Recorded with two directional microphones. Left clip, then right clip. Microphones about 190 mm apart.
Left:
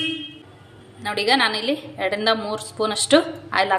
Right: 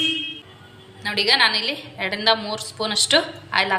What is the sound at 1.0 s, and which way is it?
A woman's voice, 50° left (ahead or behind).